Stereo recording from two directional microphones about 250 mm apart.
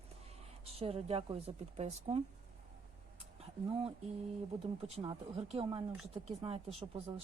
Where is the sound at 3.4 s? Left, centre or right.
Right.